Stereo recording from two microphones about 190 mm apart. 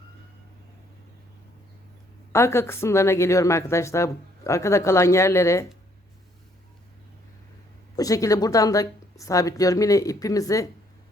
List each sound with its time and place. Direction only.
2.3 s speech: 15° left (ahead or behind)
7.9 s speech: 20° left (ahead or behind)